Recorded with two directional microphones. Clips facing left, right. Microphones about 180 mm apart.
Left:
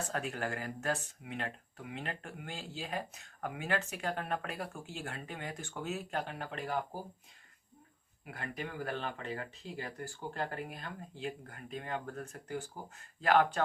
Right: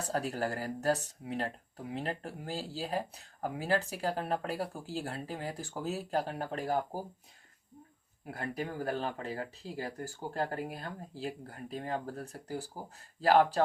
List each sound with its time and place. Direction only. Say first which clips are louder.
0.0 s speech: right 4 dB; 35° right (ahead or behind)
8.3 s speech: right 4 dB; 40° right (ahead or behind)